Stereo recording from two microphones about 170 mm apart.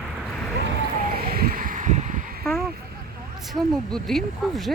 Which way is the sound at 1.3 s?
60° right (ahead or behind).